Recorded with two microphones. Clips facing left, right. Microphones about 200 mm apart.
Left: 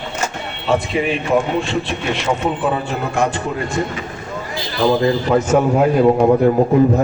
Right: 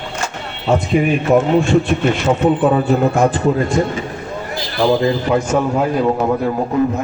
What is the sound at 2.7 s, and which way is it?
Speech, 40° right (ahead or behind).